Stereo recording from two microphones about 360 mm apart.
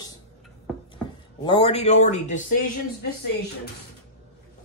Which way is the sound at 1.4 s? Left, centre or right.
Centre.